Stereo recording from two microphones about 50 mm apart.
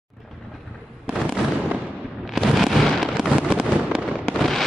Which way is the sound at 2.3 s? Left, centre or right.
Centre.